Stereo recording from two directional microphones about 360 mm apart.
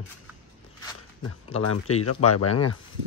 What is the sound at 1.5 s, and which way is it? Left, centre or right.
Speech, left.